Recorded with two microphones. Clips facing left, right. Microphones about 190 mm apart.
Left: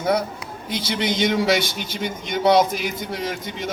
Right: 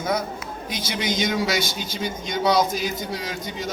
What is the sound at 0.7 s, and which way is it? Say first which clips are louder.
A man's voice: left 3 dB; 60° left (ahead or behind).